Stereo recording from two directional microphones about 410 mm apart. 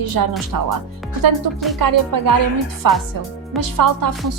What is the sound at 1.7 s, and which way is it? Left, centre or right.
A woman's voice, right.